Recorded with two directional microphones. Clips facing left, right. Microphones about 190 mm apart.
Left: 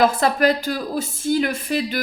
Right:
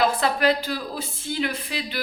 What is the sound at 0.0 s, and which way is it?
Speech, 45° left (ahead or behind).